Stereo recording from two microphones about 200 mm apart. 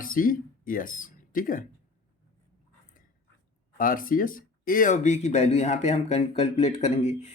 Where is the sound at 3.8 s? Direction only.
45° left (ahead or behind).